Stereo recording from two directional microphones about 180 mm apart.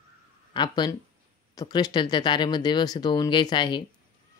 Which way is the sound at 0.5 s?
25° left (ahead or behind).